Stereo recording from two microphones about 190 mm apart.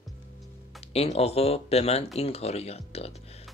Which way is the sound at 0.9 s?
30° left (ahead or behind).